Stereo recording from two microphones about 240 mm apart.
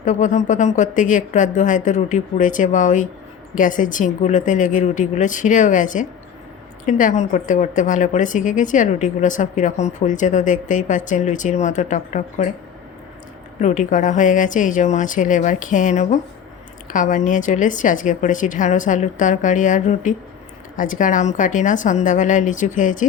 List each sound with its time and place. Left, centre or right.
0.0 s a woman's voice: left
13.6 s a woman's voice: left